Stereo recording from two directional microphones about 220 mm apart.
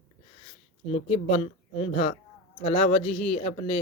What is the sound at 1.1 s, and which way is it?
Speech, 30° left (ahead or behind).